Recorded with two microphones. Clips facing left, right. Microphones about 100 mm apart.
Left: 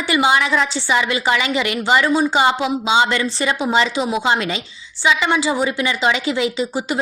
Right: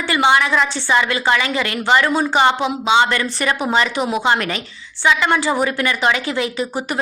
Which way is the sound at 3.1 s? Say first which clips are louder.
Even; 25° left (ahead or behind).